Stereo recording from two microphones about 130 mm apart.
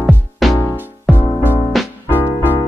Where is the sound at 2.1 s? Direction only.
15° left (ahead or behind).